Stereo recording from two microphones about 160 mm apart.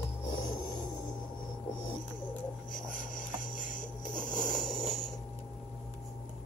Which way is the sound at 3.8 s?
55° left (ahead or behind).